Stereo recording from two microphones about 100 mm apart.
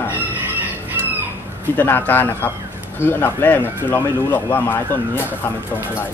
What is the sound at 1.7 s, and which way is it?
Speech, 20° left (ahead or behind).